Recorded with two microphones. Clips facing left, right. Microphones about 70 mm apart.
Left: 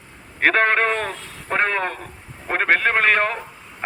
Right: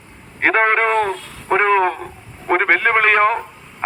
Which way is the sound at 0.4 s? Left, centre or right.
Centre.